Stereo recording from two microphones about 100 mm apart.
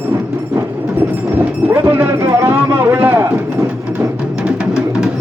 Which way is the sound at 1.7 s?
20° right (ahead or behind).